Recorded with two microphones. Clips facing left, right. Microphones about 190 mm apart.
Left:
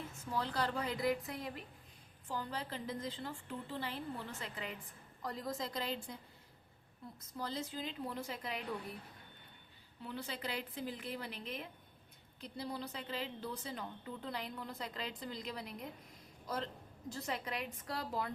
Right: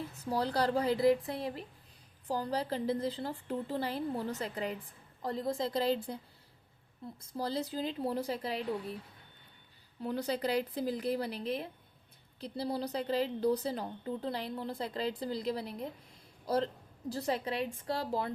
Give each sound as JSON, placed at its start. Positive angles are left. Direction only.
{"t": 0.1, "sound": "a woman's voice", "side_deg": -35}
{"t": 7.2, "sound": "a woman's voice", "side_deg": -35}
{"t": 10.0, "sound": "a woman's voice", "side_deg": -40}